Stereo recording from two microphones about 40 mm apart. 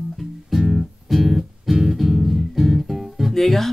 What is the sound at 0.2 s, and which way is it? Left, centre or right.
Music, centre.